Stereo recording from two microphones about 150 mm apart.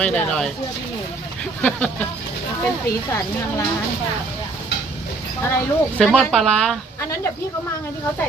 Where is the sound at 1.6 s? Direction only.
10° left (ahead or behind).